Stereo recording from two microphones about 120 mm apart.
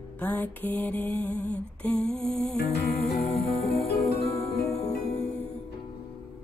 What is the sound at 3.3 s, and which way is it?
Music, 60° left (ahead or behind).